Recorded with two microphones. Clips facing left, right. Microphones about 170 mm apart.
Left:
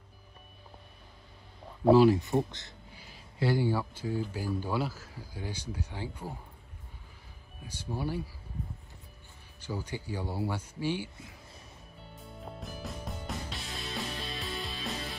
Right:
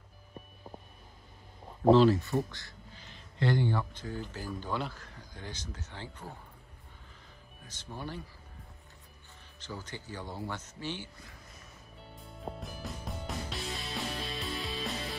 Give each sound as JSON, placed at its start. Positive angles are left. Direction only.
{"t": 1.9, "sound": "speech", "side_deg": 10}
{"t": 3.0, "sound": "speech", "side_deg": 5}
{"t": 7.6, "sound": "speech", "side_deg": 10}
{"t": 9.6, "sound": "speech", "side_deg": 10}
{"t": 12.5, "sound": "music", "side_deg": 0}